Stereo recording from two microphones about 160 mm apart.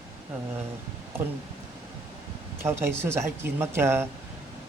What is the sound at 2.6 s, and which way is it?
A man's voice, 15° right (ahead or behind).